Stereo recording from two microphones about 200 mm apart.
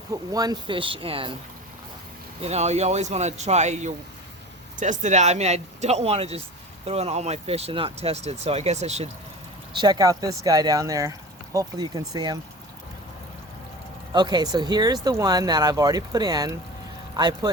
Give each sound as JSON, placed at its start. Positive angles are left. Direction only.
{"t": 0.1, "sound": "speech", "side_deg": -20}
{"t": 2.4, "sound": "speech", "side_deg": -35}
{"t": 9.7, "sound": "speech", "side_deg": -20}
{"t": 14.1, "sound": "speech", "side_deg": -20}